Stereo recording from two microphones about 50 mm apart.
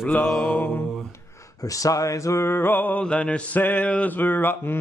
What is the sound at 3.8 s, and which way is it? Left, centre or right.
Speech, left.